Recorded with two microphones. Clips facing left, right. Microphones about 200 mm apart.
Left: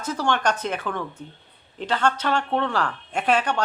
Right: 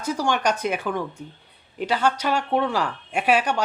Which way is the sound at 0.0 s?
10° right (ahead or behind).